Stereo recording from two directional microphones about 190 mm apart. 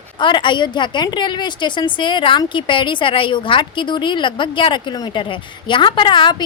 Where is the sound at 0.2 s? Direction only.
25° left (ahead or behind).